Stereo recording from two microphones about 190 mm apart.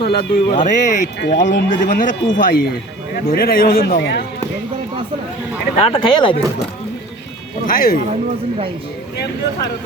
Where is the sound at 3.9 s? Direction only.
65° left (ahead or behind).